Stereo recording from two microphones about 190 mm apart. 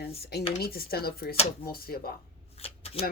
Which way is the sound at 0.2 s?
55° left (ahead or behind).